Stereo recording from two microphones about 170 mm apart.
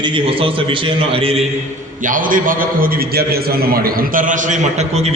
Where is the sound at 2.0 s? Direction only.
50° right (ahead or behind).